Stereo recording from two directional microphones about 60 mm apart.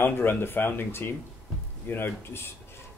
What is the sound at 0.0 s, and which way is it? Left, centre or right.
Speech, left.